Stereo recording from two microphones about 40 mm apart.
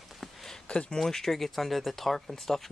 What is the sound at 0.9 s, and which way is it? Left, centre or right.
Speech, centre.